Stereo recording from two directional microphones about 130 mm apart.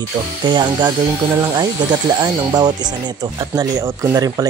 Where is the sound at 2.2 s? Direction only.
35° right (ahead or behind).